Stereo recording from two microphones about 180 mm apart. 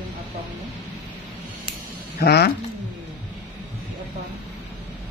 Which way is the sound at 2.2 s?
65° left (ahead or behind).